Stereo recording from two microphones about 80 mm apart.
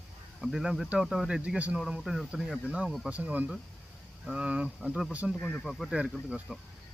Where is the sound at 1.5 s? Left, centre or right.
Centre.